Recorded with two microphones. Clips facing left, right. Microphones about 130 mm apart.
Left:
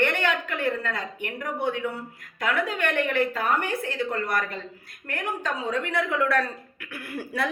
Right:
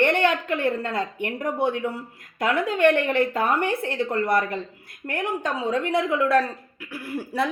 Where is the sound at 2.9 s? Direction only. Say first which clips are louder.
Right 4 dB; 30° right (ahead or behind).